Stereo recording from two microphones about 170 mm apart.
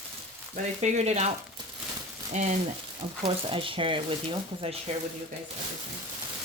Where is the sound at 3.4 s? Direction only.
30° right (ahead or behind).